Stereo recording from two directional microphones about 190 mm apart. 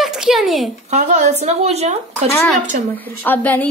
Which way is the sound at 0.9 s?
40° right (ahead or behind).